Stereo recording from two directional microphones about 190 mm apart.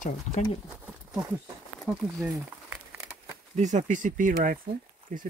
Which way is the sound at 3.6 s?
40° right (ahead or behind).